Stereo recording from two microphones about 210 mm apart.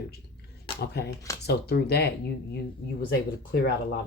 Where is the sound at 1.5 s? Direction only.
50° left (ahead or behind).